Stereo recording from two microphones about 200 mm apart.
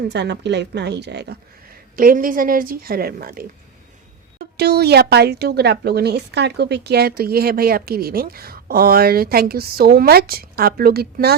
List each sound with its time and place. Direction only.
0.1 s speech: 60° right (ahead or behind)
2.0 s speech: 45° right (ahead or behind)
4.5 s speech: 55° right (ahead or behind)